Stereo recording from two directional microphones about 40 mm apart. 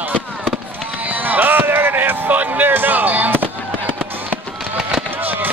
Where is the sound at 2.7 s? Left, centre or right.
Right.